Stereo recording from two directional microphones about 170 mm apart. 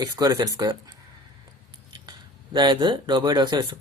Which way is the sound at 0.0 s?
20° right (ahead or behind).